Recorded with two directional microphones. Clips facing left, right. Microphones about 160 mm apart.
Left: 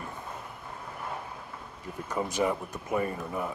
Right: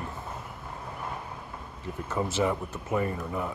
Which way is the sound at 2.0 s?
15° left (ahead or behind).